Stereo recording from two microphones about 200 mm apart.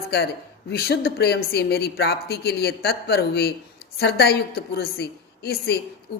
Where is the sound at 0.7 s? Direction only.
55° left (ahead or behind).